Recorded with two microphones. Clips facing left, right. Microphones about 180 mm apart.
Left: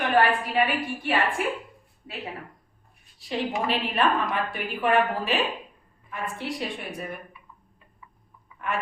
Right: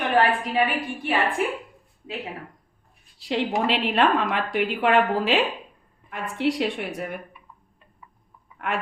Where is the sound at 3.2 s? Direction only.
75° right (ahead or behind).